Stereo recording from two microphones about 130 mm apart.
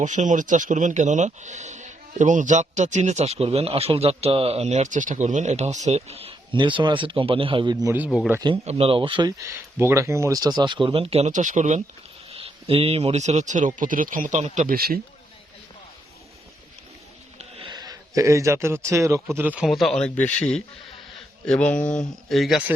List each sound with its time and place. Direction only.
0.0 s speech: 70° right (ahead or behind); by 7.9 s 30° right (ahead or behind)
8.6 s speech: 45° right (ahead or behind)
9.4 s a man's voice: 20° right (ahead or behind); by 11.3 s 50° right (ahead or behind)
11.3 s speech: 70° right (ahead or behind)
12.3 s speech: 50° right (ahead or behind); by 14.8 s 65° right (ahead or behind)
17.7 s a man's voice: 30° right (ahead or behind); by 22.6 s centre (ahead or behind)